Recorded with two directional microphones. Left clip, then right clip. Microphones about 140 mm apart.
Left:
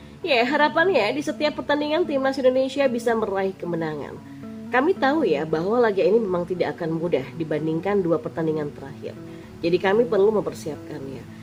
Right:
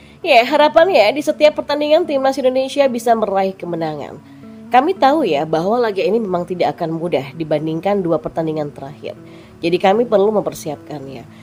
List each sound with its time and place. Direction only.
0.2 s a woman's voice: 35° right (ahead or behind)